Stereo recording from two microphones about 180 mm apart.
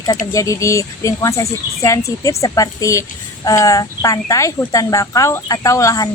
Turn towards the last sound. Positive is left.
turn(degrees=20)  # may be behind; listen again after turning